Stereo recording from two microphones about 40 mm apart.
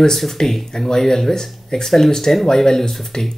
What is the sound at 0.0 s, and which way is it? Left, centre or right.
Speech, centre.